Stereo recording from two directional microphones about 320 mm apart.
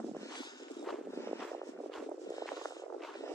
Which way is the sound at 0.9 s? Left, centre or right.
Centre.